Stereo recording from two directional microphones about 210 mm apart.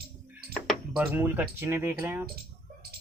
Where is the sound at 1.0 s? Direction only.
10° right (ahead or behind).